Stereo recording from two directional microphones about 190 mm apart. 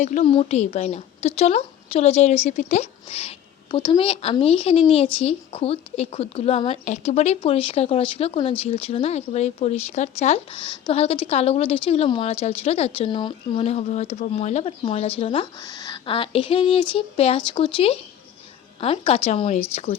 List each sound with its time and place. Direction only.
0.0 s speech: 35° left (ahead or behind)